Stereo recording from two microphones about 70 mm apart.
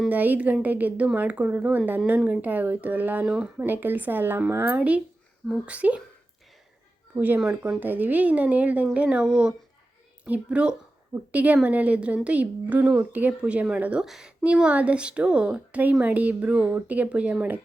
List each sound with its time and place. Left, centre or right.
0.1 s a woman's voice: right
3.2 s speech: centre
3.7 s a woman's voice: right
4.4 s speech: right
5.6 s a woman's voice: centre
7.1 s a woman's voice: right
14.0 s speech: centre